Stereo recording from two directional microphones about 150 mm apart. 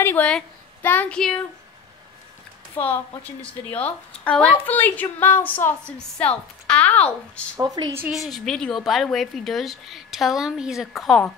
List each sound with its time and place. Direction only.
0.0 s a woman's voice: 10° left (ahead or behind)
3.7 s a woman's voice: 10° left (ahead or behind)
7.5 s a woman's voice: 25° right (ahead or behind)
8.1 s a woman's voice: centre (ahead or behind)